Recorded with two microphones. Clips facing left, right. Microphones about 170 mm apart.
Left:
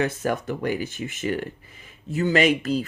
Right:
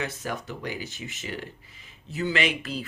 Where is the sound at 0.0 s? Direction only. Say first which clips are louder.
Left 8 dB; 50° left (ahead or behind).